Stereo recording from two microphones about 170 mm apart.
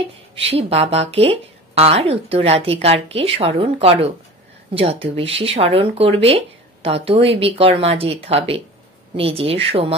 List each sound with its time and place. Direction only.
0.0 s speech: 35° right (ahead or behind)